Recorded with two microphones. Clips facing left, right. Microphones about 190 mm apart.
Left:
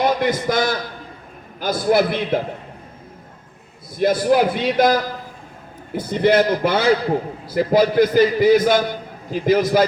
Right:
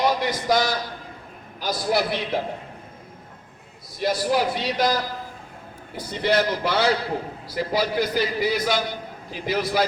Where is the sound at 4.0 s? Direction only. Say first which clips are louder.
Left 6 dB; 50° left (ahead or behind).